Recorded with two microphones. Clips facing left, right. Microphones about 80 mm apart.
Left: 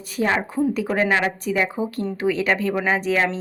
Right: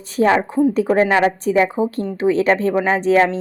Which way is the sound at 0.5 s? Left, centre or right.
Right.